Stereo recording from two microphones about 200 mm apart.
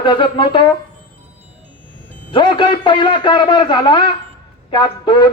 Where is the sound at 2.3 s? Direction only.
25° left (ahead or behind).